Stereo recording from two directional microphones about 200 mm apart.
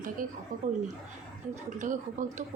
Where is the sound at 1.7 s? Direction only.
40° right (ahead or behind).